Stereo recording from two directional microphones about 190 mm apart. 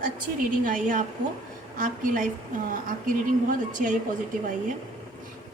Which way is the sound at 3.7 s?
45° right (ahead or behind).